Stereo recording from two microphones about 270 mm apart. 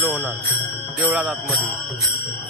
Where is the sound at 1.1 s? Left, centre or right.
Centre.